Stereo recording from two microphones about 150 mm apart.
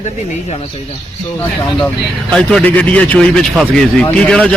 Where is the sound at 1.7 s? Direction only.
5° left (ahead or behind).